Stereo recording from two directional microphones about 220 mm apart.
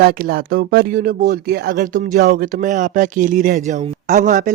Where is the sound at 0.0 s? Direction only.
45° right (ahead or behind).